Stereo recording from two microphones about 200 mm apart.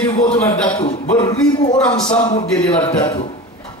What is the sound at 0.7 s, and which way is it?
Speech, 35° left (ahead or behind).